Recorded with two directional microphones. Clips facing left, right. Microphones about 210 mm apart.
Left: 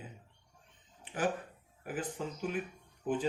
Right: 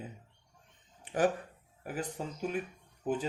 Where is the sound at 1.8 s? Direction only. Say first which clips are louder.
Even; 40° right (ahead or behind).